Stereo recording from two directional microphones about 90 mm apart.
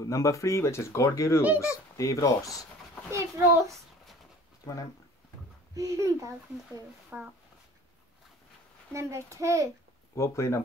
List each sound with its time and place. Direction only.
0.0 s speech: 35° left (ahead or behind)
3.1 s a child's voice: 35° right (ahead or behind)
5.8 s a child's voice: 35° right (ahead or behind)
7.1 s speech: 15° right (ahead or behind)
8.9 s a child's voice: 35° right (ahead or behind)
10.1 s speech: 35° left (ahead or behind)